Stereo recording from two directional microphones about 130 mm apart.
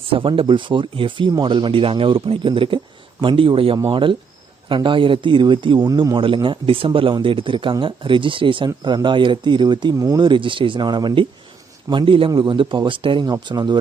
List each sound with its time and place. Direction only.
0.1 s speech: 45° right (ahead or behind)